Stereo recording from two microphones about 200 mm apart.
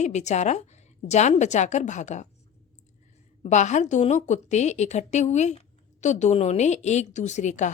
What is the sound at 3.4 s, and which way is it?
A woman's voice, 35° left (ahead or behind).